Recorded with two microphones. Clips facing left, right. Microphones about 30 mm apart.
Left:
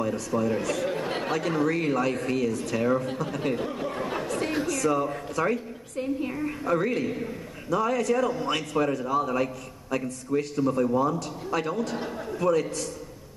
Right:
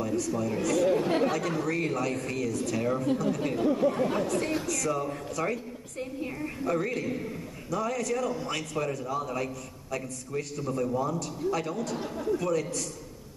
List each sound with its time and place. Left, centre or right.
0.0 s speech: left